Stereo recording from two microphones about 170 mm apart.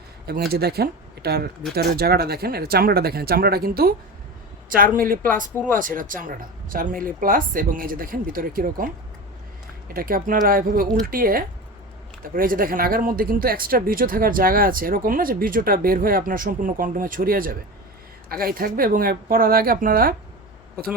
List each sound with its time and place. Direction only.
0.3 s speech: 65° right (ahead or behind)
4.9 s speech: 55° right (ahead or behind)
9.9 s speech: 60° right (ahead or behind)